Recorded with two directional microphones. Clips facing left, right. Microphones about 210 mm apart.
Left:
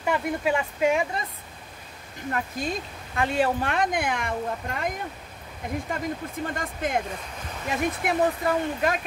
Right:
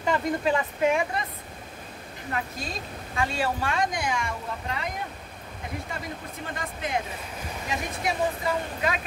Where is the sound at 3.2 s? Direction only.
55° left (ahead or behind).